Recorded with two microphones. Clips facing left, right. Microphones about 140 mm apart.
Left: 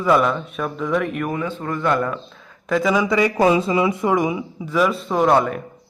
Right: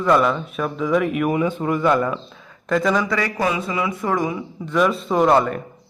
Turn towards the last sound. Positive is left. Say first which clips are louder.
# even
turn(degrees=0)  # may be behind; listen again after turning